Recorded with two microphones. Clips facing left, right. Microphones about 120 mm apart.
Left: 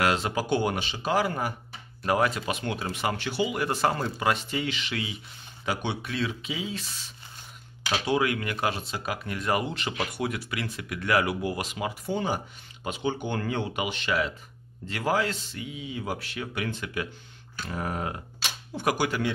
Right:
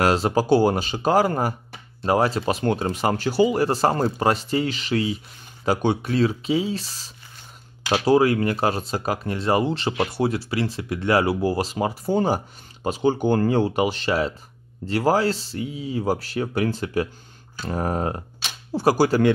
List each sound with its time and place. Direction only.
0.0 s speech: 35° right (ahead or behind)
2.0 s speech: 30° right (ahead or behind)